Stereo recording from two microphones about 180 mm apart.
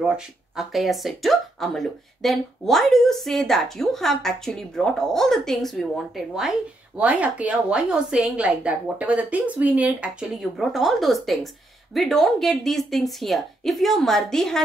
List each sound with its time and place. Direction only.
0.6 s a woman's voice: centre (ahead or behind)